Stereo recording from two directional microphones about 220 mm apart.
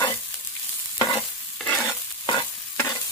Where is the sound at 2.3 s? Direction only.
15° left (ahead or behind).